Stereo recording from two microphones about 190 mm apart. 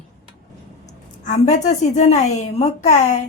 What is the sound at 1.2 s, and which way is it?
A woman's voice, 40° left (ahead or behind).